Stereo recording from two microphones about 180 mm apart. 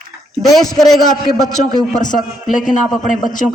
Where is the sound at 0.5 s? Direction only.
Centre (ahead or behind).